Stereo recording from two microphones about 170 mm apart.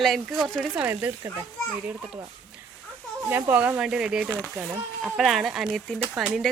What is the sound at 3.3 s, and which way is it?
Speech, 10° right (ahead or behind).